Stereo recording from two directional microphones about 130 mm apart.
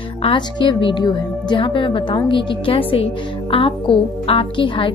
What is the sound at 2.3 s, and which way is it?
A woman's voice, 40° left (ahead or behind).